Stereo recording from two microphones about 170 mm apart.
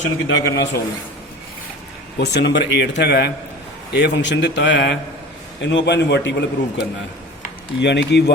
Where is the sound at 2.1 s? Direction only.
80° left.